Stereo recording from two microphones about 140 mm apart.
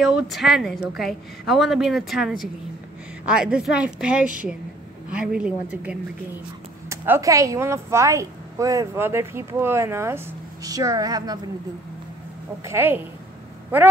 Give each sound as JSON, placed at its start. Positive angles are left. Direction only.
{"t": 0.0, "sound": "a woman's voice", "side_deg": 0}
{"t": 6.9, "sound": "a woman's voice", "side_deg": -20}
{"t": 12.6, "sound": "a woman's voice", "side_deg": -15}